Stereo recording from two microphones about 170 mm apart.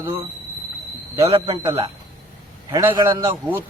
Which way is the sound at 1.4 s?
30° right (ahead or behind).